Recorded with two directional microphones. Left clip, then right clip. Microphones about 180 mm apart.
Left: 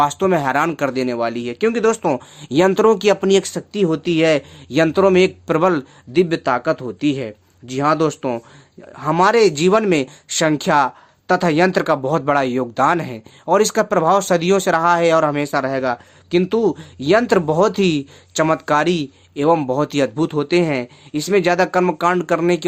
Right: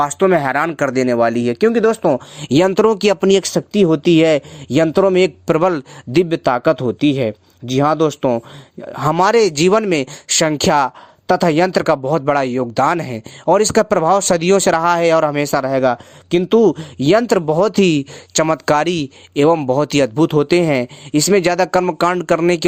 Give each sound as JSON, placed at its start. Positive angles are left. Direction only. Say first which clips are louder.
{"t": 0.0, "sound": "speech", "louder": "right 2 dB", "side_deg": -25}
{"t": 2.4, "sound": "speech", "louder": "right 1 dB", "side_deg": -45}